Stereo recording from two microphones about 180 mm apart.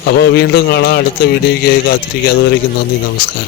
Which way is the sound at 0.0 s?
65° left (ahead or behind).